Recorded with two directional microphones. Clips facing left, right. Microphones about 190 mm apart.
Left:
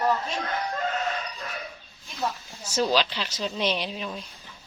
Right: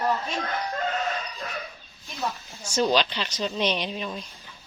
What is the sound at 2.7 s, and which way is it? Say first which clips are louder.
Speech: right 1 dB; 5° left (ahead or behind).